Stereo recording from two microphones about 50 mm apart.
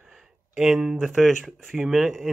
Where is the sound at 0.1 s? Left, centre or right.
Centre.